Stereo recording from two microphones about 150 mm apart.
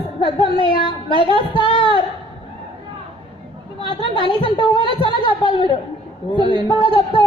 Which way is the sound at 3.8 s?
35° left (ahead or behind).